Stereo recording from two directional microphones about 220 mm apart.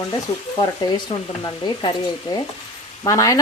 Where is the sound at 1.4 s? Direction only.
20° left (ahead or behind).